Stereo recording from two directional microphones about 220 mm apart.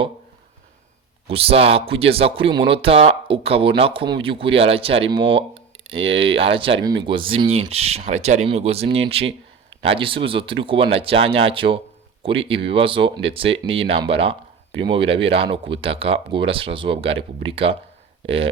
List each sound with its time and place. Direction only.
1.3 s speech: 25° right (ahead or behind)